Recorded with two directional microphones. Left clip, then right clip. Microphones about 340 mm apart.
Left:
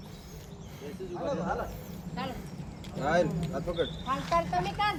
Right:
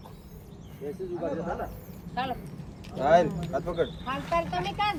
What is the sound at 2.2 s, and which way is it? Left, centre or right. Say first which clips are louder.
Speech: right 7 dB; centre.